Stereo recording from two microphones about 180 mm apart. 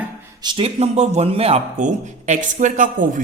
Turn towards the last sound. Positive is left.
turn(degrees=-45)  # may be behind; listen again after turning